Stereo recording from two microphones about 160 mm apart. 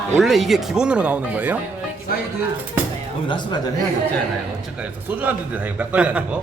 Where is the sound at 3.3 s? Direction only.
30° left (ahead or behind).